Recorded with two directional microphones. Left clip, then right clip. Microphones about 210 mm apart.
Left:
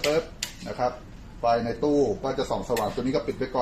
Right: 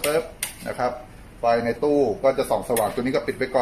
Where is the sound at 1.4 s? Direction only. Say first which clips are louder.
Right 3 dB; 20° right (ahead or behind).